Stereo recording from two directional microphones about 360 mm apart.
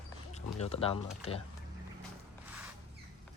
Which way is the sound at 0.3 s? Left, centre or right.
Centre.